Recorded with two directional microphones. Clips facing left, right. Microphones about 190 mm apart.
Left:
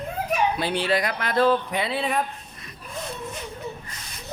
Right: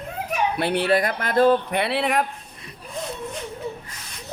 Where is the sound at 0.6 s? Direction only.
60° right (ahead or behind).